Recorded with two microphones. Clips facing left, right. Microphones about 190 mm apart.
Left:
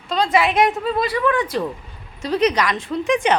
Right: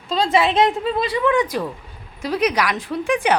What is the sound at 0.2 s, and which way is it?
A woman's voice, 25° right (ahead or behind).